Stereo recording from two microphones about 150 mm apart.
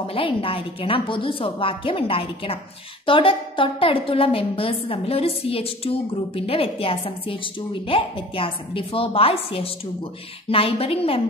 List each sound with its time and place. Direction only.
0.0 s a woman's voice: 35° left (ahead or behind)